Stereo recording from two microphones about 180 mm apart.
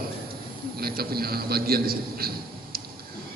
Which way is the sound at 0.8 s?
55° right (ahead or behind).